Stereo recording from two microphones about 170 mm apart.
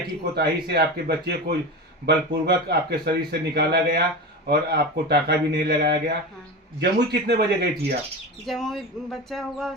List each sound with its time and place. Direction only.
0.3 s a man's voice: 75° right (ahead or behind)
6.7 s a man's voice: 80° right
8.4 s speech: centre (ahead or behind)